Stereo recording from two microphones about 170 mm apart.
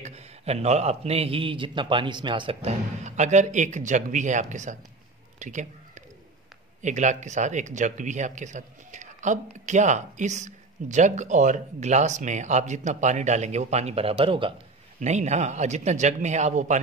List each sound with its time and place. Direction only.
0.0 s a man's voice: 40° right (ahead or behind)
3.0 s speech: 45° right (ahead or behind)
5.4 s a sound: 45° right (ahead or behind)
6.8 s speech: 45° right (ahead or behind)
15.0 s speech: 40° right (ahead or behind)